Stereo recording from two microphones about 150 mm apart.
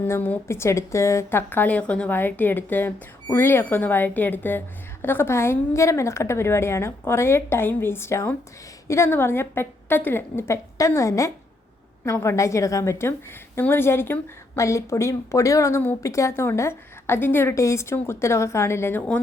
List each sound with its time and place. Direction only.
0.0 s a woman's voice: 10° left (ahead or behind)